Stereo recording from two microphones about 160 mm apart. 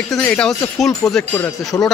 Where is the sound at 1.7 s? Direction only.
20° left (ahead or behind).